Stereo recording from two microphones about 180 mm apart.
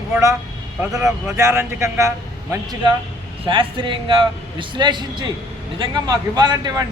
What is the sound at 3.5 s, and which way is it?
Speech, 25° right (ahead or behind).